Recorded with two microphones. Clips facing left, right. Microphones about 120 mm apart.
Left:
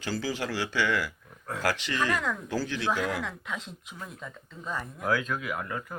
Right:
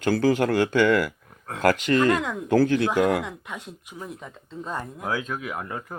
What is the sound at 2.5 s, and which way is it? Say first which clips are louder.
Speech: right 12 dB; 60° right (ahead or behind).